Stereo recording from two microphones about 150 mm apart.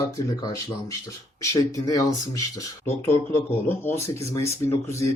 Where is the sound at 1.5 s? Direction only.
25° left (ahead or behind).